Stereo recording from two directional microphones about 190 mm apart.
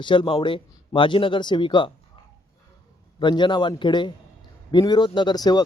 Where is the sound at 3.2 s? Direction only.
25° left (ahead or behind).